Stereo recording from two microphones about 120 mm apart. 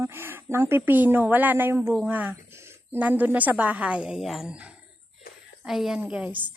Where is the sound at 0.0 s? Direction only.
20° right (ahead or behind).